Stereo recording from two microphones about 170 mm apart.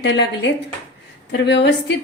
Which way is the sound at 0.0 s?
90° left.